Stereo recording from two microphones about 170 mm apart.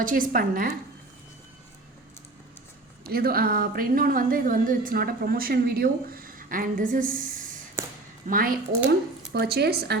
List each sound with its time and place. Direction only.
0.0 s a woman's voice: 55° right (ahead or behind)
3.0 s a woman's voice: 60° right (ahead or behind)
7.8 s a sound: 15° right (ahead or behind)
8.3 s speech: 55° right (ahead or behind)